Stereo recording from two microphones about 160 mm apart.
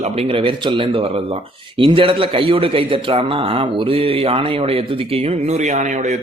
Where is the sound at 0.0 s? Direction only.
40° right (ahead or behind).